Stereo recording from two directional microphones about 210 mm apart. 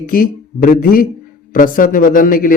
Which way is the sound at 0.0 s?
40° left (ahead or behind).